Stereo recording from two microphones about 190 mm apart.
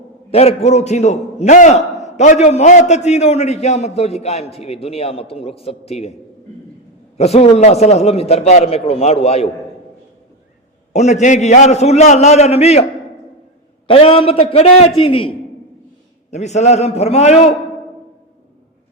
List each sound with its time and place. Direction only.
0.3 s a man's voice: 35° left (ahead or behind)
7.2 s a man's voice: 35° left (ahead or behind)
10.9 s a man's voice: 35° left (ahead or behind)
13.8 s a man's voice: 30° left (ahead or behind)